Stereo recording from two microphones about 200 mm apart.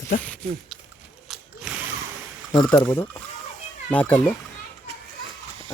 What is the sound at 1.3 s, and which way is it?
Ratchet, centre (ahead or behind).